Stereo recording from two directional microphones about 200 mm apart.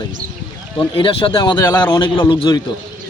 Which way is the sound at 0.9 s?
25° left (ahead or behind).